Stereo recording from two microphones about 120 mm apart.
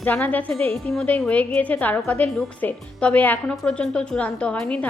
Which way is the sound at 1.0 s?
15° left (ahead or behind).